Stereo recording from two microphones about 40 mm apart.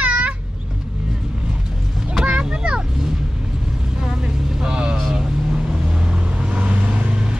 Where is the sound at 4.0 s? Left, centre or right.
Centre.